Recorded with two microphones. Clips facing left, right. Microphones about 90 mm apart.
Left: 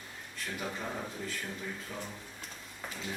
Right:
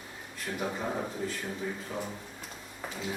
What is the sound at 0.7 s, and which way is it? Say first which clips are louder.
Speech: right 5 dB; 15° right (ahead or behind).